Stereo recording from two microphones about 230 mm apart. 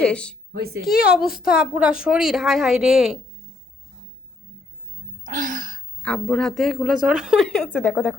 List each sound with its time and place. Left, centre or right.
0.0 s a woman's voice: centre
0.5 s a woman's voice: right
1.3 s a woman's voice: left
1.6 s a woman's voice: centre
5.2 s a sound: right
6.0 s a woman's voice: centre